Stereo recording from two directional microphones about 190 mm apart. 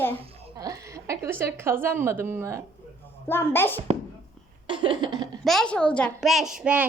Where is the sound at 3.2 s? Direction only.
10° left (ahead or behind).